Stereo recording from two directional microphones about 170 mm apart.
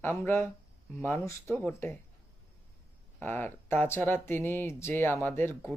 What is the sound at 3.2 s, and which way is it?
Speech, 10° left (ahead or behind).